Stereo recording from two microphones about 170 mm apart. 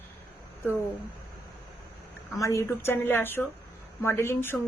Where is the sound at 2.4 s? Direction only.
20° left (ahead or behind).